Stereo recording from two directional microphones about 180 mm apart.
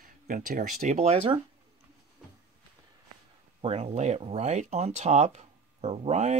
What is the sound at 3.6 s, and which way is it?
Speech, 35° right (ahead or behind).